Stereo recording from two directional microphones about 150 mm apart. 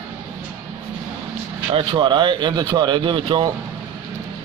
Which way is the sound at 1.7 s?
30° right (ahead or behind).